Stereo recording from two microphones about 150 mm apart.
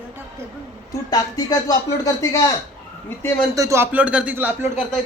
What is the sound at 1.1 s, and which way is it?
Speech, 25° left (ahead or behind).